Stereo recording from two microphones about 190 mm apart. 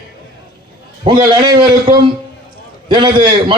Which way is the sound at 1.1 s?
25° right (ahead or behind).